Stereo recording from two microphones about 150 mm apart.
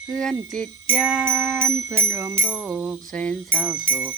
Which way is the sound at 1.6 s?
20° right (ahead or behind).